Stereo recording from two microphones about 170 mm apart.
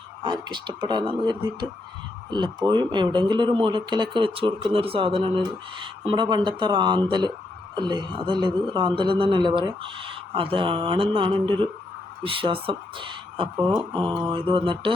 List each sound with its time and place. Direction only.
0.2 s a woman's voice: 25° right (ahead or behind)